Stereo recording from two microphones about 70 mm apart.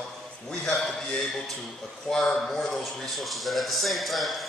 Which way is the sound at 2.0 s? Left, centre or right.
Centre.